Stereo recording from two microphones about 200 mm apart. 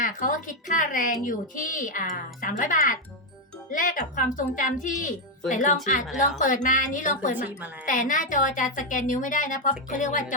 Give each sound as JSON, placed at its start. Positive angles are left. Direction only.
{"t": 0.0, "sound": "a woman's voice", "side_deg": 40}